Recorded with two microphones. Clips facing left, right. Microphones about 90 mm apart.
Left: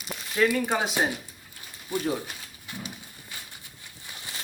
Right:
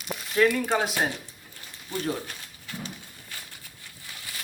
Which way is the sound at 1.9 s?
15° left (ahead or behind).